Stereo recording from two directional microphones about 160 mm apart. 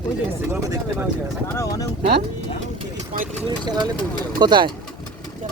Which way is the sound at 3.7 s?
25° right (ahead or behind).